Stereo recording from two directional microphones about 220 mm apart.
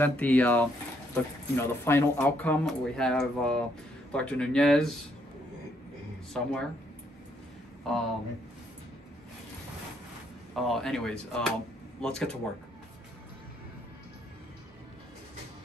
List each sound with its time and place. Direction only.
0.0 s speech: 5° left (ahead or behind)
6.3 s speech: centre (ahead or behind)
10.5 s speech: centre (ahead or behind)